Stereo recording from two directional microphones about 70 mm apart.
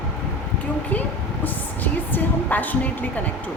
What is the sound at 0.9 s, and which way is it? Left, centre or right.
A woman's voice, left.